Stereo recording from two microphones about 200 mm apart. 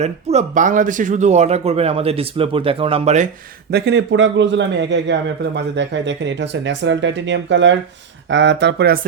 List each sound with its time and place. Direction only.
0.0 s speech: 35° right (ahead or behind)
3.7 s a man's voice: 55° right (ahead or behind)